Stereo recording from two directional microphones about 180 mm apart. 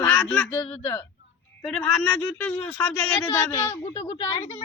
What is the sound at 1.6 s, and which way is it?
Speech, 5° left (ahead or behind).